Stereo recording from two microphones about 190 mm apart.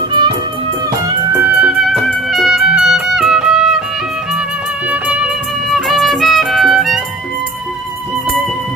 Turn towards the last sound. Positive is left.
turn(degrees=0)  # may be behind; listen again after turning